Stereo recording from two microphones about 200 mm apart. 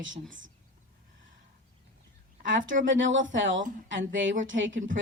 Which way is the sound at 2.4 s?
70° right (ahead or behind).